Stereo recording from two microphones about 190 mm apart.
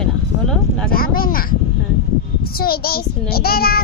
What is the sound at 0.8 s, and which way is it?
A child's voice, 50° left (ahead or behind).